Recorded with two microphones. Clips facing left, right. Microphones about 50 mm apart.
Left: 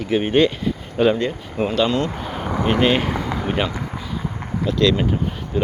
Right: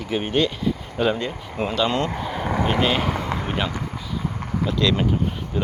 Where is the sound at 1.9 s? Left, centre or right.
Right.